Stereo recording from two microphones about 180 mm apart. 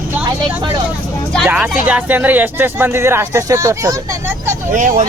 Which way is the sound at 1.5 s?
10° right (ahead or behind).